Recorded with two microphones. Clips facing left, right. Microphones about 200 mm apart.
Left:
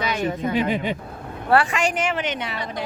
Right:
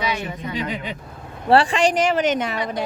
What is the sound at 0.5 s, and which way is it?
Speech, 55° left (ahead or behind).